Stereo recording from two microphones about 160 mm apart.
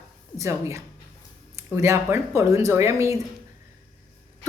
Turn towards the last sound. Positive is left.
turn(degrees=-15)  # may be behind; listen again after turning